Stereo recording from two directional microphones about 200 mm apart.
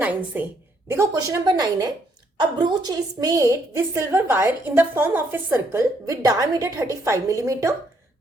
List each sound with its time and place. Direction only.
0.0 s a woman's voice: 10° right (ahead or behind)